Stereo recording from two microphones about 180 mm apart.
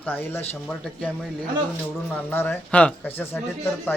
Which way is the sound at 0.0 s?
10° left (ahead or behind).